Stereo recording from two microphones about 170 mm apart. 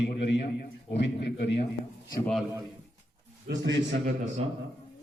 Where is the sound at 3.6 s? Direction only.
90° right.